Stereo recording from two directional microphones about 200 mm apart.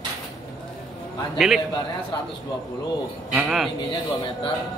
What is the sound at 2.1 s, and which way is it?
Speech, 20° left (ahead or behind).